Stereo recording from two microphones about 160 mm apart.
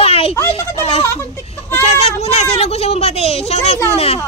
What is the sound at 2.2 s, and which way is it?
A child's voice, 40° left (ahead or behind).